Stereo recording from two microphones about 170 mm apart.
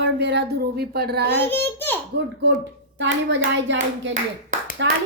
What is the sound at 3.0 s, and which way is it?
Speech, 90° right.